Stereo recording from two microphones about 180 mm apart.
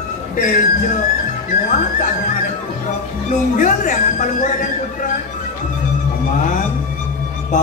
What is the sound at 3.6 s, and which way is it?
Speech, 45° left (ahead or behind).